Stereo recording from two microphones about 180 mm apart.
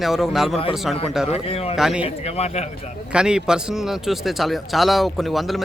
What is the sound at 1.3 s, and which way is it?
Speech, 35° left (ahead or behind).